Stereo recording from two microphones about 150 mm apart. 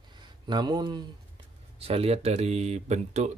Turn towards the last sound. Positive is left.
turn(degrees=-50)  # may be behind; listen again after turning